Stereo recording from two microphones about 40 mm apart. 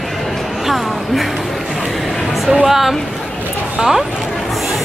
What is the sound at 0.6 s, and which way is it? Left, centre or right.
Music, centre.